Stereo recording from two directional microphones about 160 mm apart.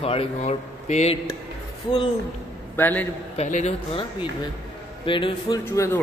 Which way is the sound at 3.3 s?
45° left (ahead or behind).